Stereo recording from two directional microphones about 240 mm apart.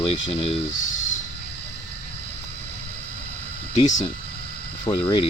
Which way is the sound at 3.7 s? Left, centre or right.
Left.